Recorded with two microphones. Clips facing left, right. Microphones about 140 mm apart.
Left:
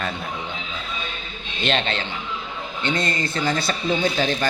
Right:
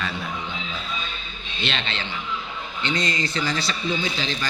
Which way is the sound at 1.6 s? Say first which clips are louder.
Left 6 dB; 45° left (ahead or behind).